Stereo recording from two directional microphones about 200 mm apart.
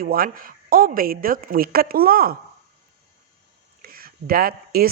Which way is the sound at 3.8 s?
45° right (ahead or behind).